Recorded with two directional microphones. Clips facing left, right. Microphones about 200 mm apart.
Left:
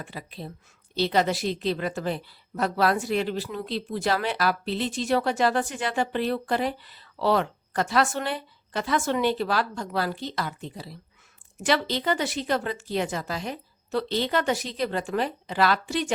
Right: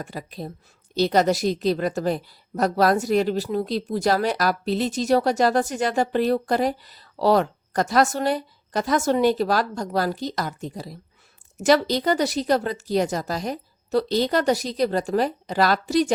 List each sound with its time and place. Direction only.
0.0 s a woman's voice: 45° right (ahead or behind)